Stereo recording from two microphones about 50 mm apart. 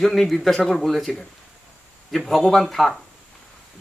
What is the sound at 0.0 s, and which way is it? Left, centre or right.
Speech, centre.